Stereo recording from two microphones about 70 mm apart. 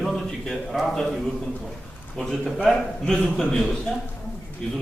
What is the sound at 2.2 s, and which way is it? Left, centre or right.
A man's voice, centre.